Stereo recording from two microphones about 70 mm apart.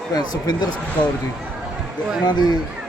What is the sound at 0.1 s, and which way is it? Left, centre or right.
Speech, left.